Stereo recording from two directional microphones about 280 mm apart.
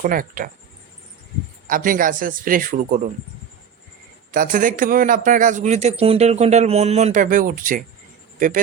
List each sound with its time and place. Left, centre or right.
0.0 s a man's voice: right
1.6 s a man's voice: right
4.3 s a man's voice: right